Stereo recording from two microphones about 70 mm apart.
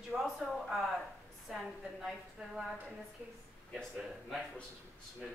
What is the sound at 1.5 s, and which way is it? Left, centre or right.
A woman's voice, centre.